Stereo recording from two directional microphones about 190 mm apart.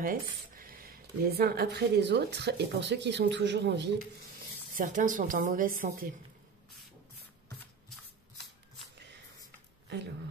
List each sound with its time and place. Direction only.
0.0 s speech: 50° right (ahead or behind); by 3.9 s 65° right (ahead or behind)
4.7 s speech: 45° right (ahead or behind)
9.8 s speech: 65° right (ahead or behind)